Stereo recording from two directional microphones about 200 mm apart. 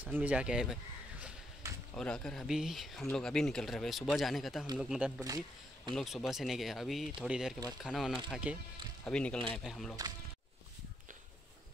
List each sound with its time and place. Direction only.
0.0 s speech: 10° right (ahead or behind)
1.6 s a sound: 15° right (ahead or behind)
2.0 s speech: 5° left (ahead or behind)
9.0 s speech: 5° left (ahead or behind)